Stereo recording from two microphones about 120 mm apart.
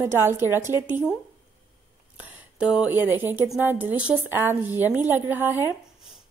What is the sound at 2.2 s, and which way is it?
A woman's voice, 10° right (ahead or behind).